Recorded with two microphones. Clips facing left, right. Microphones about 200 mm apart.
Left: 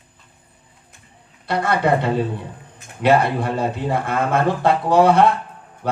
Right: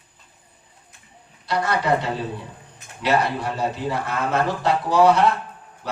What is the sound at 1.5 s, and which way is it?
A man's voice, 55° left (ahead or behind).